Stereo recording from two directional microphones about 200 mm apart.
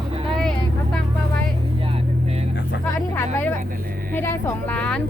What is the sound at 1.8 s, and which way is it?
Vehicle, 30° right (ahead or behind).